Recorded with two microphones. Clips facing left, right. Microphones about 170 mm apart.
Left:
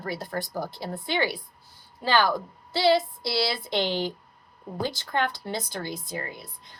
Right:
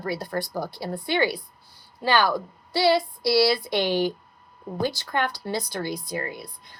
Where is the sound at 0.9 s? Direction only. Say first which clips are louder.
Right 4 dB; 15° right (ahead or behind).